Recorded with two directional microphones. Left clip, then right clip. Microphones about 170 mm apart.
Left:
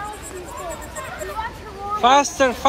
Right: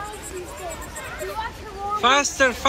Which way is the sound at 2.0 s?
20° left (ahead or behind).